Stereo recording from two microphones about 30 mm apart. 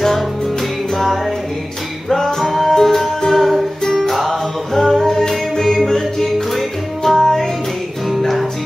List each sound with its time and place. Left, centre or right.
0.9 s music: centre
2.0 s music: centre
3.8 s music: centre
4.3 s music: centre
6.5 s music: centre